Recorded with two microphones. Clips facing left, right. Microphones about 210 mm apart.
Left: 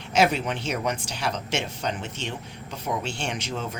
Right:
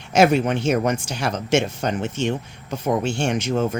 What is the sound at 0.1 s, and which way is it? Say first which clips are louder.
Speech: right 6 dB; 45° right (ahead or behind).